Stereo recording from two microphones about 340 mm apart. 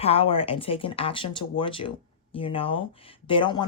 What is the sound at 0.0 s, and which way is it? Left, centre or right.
Speech, centre.